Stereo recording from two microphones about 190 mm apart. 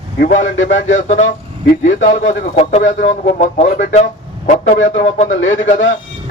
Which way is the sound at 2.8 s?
70° left (ahead or behind).